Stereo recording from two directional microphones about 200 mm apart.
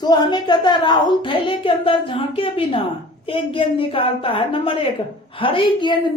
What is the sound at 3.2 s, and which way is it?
A woman's voice, 25° left (ahead or behind).